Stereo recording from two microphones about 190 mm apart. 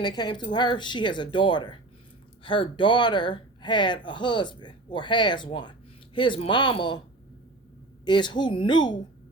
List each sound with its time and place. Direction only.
0.0 s speech: 20° left (ahead or behind)
8.0 s speech: 25° left (ahead or behind)